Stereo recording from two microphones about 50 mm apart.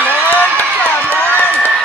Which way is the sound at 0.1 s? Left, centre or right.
Left.